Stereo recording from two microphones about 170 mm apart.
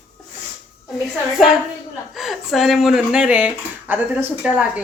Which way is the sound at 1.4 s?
Centre (ahead or behind).